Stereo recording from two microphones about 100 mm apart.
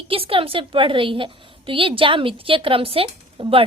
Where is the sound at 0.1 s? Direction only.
65° right (ahead or behind).